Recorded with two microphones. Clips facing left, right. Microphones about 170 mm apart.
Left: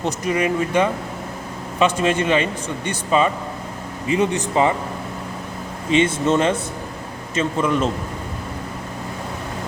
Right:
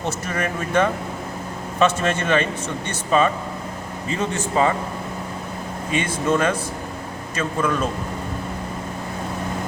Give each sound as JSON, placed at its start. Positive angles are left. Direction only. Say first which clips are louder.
{"t": 0.0, "sound": "speech", "louder": "left 4 dB", "side_deg": 15}
{"t": 5.9, "sound": "speech", "louder": "left 4 dB", "side_deg": 25}